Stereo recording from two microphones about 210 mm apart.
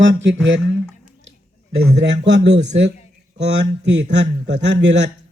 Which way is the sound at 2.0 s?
55° right (ahead or behind).